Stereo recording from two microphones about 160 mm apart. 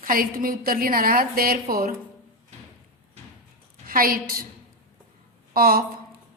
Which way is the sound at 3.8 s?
65° right (ahead or behind).